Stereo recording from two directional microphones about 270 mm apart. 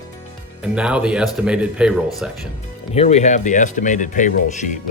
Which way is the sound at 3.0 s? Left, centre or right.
Left.